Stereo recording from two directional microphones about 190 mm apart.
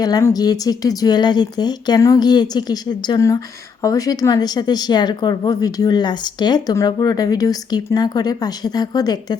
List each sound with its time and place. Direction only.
0.0 s speech: 15° left (ahead or behind)